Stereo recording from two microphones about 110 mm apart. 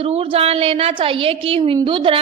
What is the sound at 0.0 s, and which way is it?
A woman's voice, 65° right (ahead or behind).